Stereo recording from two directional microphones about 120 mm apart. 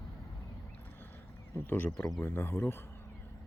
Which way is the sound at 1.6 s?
20° left (ahead or behind).